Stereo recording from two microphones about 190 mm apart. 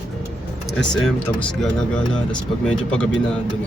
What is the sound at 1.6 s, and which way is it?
Speech, 5° left (ahead or behind).